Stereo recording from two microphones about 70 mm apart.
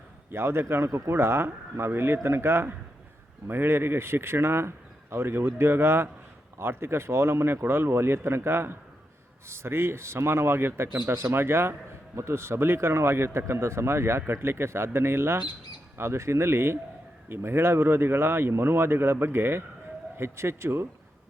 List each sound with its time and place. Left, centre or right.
0.3 s speech: right